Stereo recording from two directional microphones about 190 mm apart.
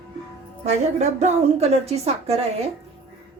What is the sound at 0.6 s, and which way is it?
A woman's voice, 35° right (ahead or behind).